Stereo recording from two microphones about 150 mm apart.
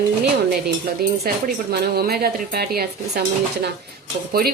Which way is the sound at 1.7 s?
90° right.